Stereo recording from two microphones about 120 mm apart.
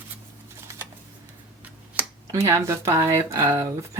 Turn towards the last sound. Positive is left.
turn(degrees=-25)  # may be behind; listen again after turning